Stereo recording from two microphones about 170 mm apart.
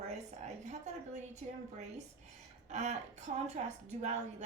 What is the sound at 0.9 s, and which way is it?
Speech, 45° right (ahead or behind).